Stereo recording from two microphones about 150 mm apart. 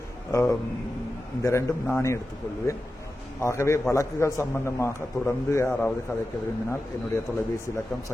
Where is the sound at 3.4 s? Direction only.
20° left (ahead or behind).